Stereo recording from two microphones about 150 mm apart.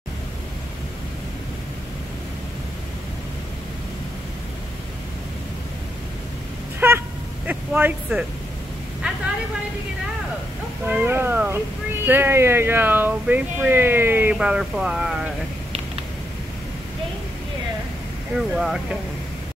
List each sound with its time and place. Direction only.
6.8 s a sound: 15° right (ahead or behind)
10.9 s speech: 10° right (ahead or behind)
18.5 s speech: 5° right (ahead or behind)